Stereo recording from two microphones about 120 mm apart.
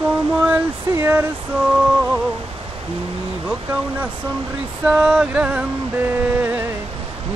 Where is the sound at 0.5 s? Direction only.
20° right (ahead or behind).